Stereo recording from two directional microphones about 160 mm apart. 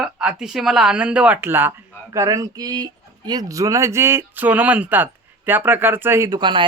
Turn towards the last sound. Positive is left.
turn(degrees=-30)  # may be behind; listen again after turning